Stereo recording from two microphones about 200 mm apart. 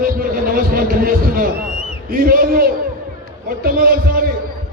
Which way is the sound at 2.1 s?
45° right (ahead or behind).